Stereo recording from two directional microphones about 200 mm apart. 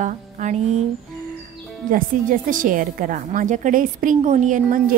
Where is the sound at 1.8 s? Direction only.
45° right (ahead or behind).